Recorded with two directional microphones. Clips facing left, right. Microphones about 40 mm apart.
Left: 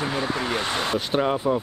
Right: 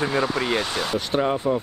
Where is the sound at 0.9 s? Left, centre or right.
Centre.